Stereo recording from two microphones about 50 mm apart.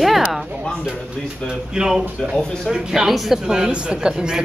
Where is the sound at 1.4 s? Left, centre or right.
Centre.